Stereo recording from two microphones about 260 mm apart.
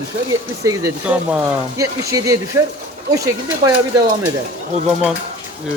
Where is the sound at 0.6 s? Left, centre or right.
Centre.